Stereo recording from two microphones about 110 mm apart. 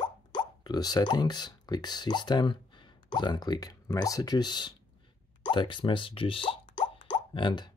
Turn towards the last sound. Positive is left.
turn(degrees=45)  # may be behind; listen again after turning